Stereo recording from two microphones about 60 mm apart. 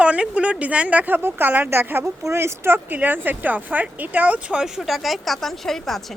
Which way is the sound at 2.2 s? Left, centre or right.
Right.